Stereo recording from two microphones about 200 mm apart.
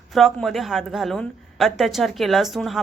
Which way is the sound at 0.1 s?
Centre (ahead or behind).